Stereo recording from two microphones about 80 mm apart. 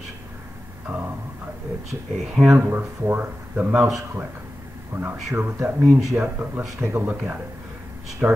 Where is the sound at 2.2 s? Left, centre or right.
Centre.